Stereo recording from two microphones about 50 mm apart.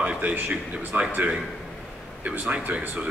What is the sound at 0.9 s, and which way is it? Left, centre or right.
Speech, right.